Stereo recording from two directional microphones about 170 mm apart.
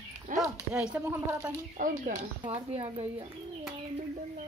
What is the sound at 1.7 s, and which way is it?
Speech, 50° right (ahead or behind).